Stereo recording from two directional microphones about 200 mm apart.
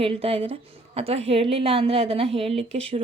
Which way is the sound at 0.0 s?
30° right (ahead or behind).